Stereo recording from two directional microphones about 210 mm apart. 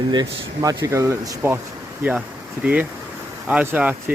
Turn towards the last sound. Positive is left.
turn(degrees=-5)  # may be behind; listen again after turning